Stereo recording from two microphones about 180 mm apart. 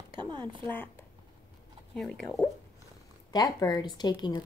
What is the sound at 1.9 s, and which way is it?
Speech, centre (ahead or behind).